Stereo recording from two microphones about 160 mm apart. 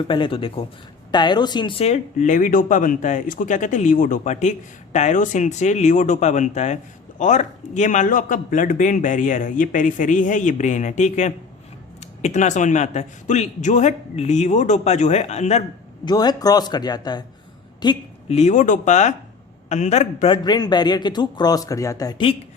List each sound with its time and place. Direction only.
0.1 s a man's voice: 35° left (ahead or behind)
1.8 s speech: 45° left (ahead or behind)
16.0 s a man's voice: 25° left (ahead or behind)
18.3 s speech: 45° left (ahead or behind)
20.3 s a man's voice: 25° left (ahead or behind)